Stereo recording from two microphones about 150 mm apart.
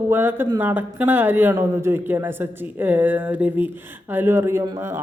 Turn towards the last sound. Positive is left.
turn(degrees=-15)  # may be behind; listen again after turning